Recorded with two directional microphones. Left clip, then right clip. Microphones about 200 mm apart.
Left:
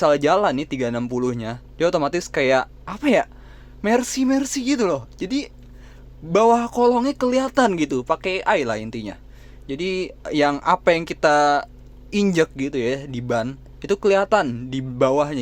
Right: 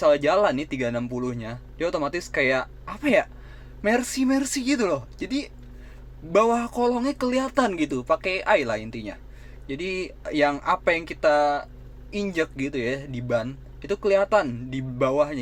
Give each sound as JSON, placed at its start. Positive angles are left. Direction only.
{"t": 0.0, "sound": "speech", "side_deg": 30}
{"t": 12.5, "sound": "speech", "side_deg": 25}